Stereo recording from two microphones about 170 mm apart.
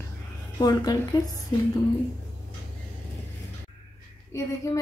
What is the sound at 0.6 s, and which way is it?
Speech, 25° left (ahead or behind).